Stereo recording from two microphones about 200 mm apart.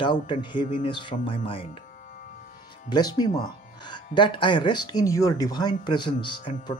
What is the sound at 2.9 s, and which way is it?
Speech, 20° left (ahead or behind).